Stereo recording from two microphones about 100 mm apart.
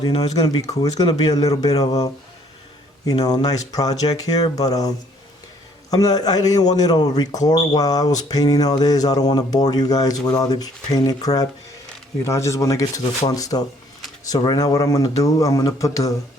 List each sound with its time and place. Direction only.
0.2 s speech: 40° left (ahead or behind)
5.9 s speech: 40° left (ahead or behind)